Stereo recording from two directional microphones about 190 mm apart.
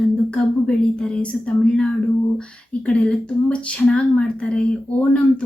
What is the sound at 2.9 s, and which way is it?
Speech, 5° left (ahead or behind).